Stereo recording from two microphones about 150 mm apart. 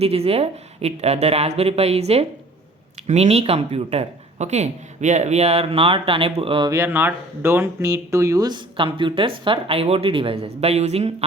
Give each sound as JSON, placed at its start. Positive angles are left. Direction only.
{"t": 0.0, "sound": "speech", "side_deg": -40}
{"t": 6.7, "sound": "speech", "side_deg": -15}